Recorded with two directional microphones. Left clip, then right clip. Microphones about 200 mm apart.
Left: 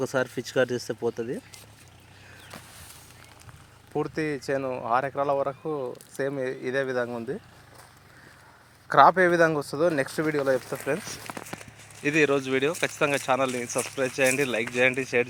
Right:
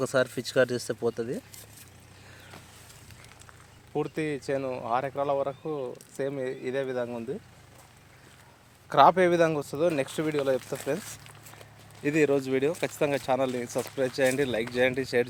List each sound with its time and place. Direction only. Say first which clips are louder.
0.0 s speech: right 1 dB; 5° right (ahead or behind)
3.9 s speech: left 2 dB; 15° left (ahead or behind)
8.9 s speech: left 2 dB; 25° left (ahead or behind)
12.0 s speech: left 2 dB; centre (ahead or behind)